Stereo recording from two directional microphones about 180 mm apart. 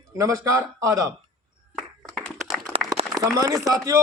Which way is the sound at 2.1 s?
5° left (ahead or behind).